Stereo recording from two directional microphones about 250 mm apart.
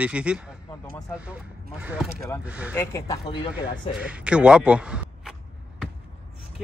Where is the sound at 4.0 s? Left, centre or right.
Centre.